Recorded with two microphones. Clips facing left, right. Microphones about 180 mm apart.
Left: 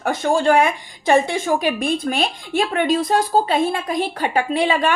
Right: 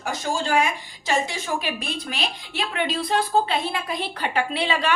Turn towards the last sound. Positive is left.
turn(degrees=45)  # may be behind; listen again after turning